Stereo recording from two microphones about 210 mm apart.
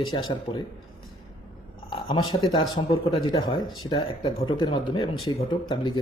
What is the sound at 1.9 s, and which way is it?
A man's voice, 20° left (ahead or behind).